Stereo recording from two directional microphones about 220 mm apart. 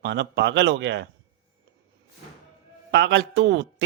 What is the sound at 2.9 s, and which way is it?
Speech, 50° right (ahead or behind).